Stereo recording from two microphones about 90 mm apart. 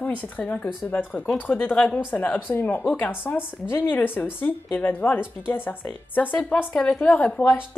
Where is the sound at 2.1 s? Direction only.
20° left (ahead or behind).